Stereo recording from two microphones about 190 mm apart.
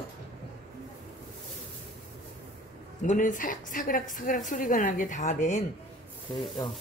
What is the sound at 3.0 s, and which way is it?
A woman's voice, 40° left (ahead or behind).